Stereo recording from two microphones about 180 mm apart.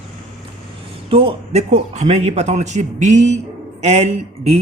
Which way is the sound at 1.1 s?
30° right (ahead or behind).